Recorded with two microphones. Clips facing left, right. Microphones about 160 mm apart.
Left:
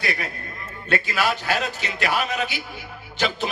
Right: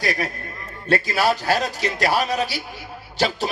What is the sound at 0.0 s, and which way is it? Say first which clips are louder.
A man's voice: right 4 dB; 40° right (ahead or behind).